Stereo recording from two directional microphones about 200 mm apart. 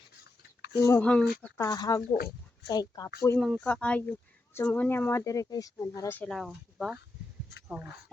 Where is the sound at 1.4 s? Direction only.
15° left (ahead or behind).